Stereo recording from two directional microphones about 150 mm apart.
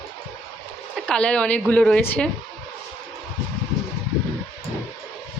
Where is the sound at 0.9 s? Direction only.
5° left (ahead or behind).